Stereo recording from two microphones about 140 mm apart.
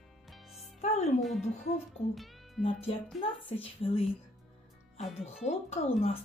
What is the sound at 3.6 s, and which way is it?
Speech, 40° left (ahead or behind).